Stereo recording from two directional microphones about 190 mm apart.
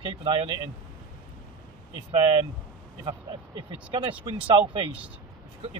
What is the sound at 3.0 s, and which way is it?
Speech, 25° right (ahead or behind).